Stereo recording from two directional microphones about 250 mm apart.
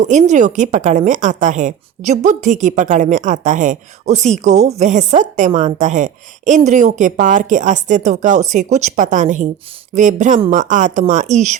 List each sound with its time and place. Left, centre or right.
0.0 s a woman's voice: right